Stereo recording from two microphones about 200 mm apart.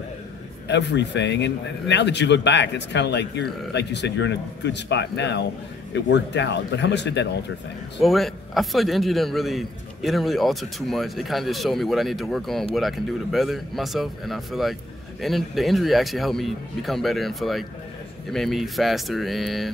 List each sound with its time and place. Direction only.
0.7 s a man's voice: 60° left (ahead or behind)
8.0 s a man's voice: centre (ahead or behind)